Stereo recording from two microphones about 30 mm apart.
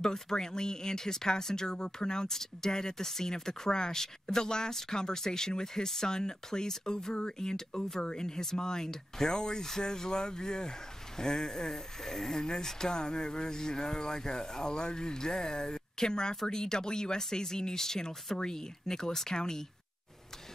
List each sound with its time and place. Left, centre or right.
0.0 s speech: left
2.2 s speech: centre